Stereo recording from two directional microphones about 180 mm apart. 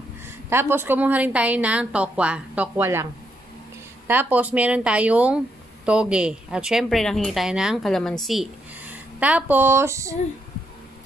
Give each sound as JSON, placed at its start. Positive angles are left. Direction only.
{"t": 0.2, "sound": "a woman's voice", "side_deg": -15}
{"t": 4.1, "sound": "a woman's voice", "side_deg": -10}